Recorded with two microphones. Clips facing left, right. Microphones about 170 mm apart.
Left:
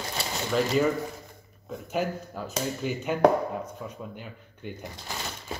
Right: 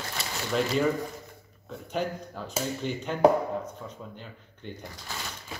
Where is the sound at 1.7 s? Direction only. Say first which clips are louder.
Left 2 dB; 5° left (ahead or behind).